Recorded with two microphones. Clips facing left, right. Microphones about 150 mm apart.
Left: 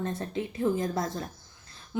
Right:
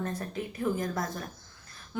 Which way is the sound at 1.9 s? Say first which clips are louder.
Left 3 dB; 20° left (ahead or behind).